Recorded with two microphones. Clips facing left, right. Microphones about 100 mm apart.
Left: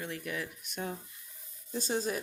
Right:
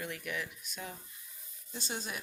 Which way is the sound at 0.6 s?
60° left (ahead or behind).